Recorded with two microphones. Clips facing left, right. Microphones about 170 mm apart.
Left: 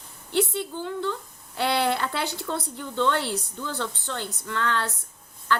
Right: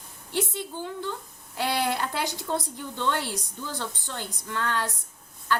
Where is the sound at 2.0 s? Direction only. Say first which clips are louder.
Left 1 dB; 15° right (ahead or behind).